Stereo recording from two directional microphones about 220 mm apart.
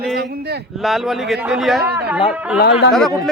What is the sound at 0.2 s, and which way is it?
Speech, 45° right (ahead or behind).